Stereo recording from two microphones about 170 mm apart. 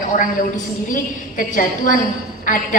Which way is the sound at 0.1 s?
50° left (ahead or behind).